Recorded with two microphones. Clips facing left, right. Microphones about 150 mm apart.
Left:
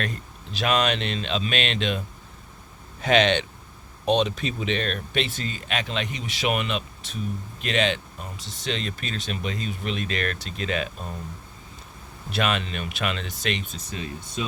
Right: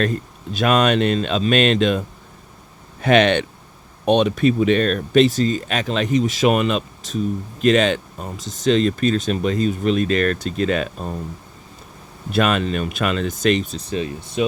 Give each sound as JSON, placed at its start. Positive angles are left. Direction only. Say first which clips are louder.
{"t": 0.5, "sound": "speech", "louder": "right 7 dB", "side_deg": -50}
{"t": 3.0, "sound": "speech", "louder": "right 5 dB", "side_deg": -55}
{"t": 12.3, "sound": "speech", "louder": "right 7 dB", "side_deg": -45}